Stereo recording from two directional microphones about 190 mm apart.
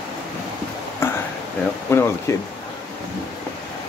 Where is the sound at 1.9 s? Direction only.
15° left (ahead or behind).